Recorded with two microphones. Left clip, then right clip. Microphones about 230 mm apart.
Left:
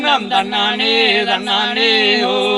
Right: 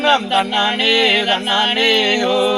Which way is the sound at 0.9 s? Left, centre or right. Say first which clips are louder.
Even; centre.